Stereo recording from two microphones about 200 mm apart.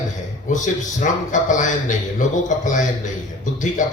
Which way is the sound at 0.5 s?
40° left (ahead or behind).